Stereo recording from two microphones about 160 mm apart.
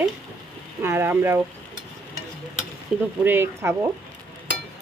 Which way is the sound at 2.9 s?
5° right (ahead or behind).